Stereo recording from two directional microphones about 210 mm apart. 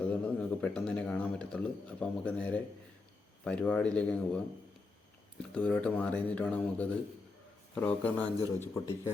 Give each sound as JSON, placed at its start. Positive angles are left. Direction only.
{"t": 0.0, "sound": "speech", "side_deg": 5}
{"t": 5.5, "sound": "speech", "side_deg": 5}